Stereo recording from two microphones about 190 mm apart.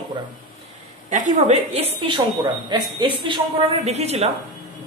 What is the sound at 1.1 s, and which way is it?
A man's voice, 40° right (ahead or behind).